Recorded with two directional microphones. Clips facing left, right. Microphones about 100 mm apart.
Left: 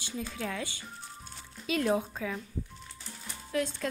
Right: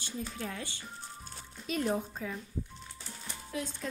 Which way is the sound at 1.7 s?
90° left.